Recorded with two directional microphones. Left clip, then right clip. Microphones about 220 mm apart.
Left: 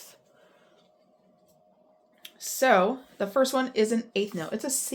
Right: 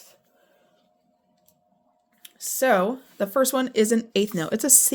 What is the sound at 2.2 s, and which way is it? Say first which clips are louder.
Speech: right 2 dB; 30° right (ahead or behind).